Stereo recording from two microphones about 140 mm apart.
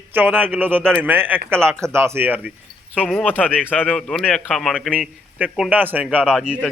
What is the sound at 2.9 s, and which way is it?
Speech, 5° left (ahead or behind).